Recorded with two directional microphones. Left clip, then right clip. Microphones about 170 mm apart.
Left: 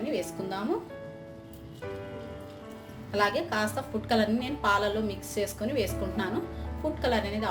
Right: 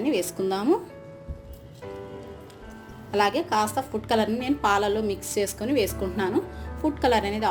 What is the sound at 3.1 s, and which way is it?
A woman's voice, 40° right (ahead or behind).